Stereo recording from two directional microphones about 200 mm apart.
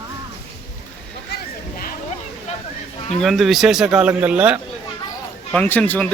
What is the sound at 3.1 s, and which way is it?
A man's voice, centre (ahead or behind).